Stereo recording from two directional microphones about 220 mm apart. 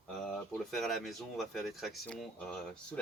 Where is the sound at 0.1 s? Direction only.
5° left (ahead or behind).